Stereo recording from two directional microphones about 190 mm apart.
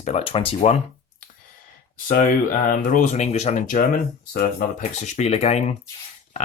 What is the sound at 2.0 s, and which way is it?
Speech, 45° left (ahead or behind).